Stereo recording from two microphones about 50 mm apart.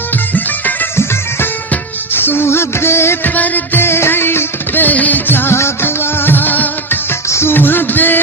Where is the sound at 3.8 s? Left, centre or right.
Left.